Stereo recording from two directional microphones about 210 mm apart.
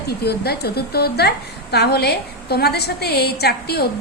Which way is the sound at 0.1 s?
50° left (ahead or behind).